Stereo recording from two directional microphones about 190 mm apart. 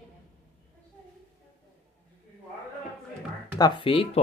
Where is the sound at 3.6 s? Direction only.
25° left (ahead or behind).